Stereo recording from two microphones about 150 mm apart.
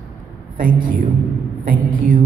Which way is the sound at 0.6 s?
70° right (ahead or behind).